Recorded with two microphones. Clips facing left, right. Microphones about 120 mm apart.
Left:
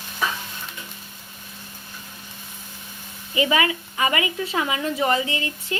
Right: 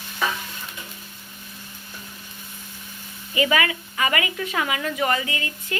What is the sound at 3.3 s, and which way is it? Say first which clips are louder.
Speech: left 1 dB; 25° left (ahead or behind).